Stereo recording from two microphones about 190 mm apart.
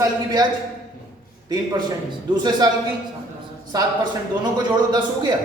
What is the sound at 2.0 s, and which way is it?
Speech, 25° right (ahead or behind).